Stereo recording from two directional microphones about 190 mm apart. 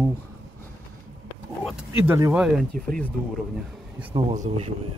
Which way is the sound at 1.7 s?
5° right (ahead or behind).